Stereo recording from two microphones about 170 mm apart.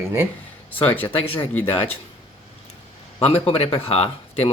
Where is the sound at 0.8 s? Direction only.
10° left (ahead or behind).